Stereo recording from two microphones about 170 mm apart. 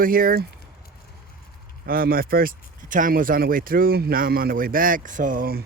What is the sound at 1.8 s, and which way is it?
Speech, 60° right (ahead or behind).